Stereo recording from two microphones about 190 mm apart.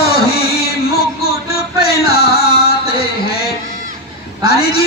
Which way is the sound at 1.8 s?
55° left (ahead or behind).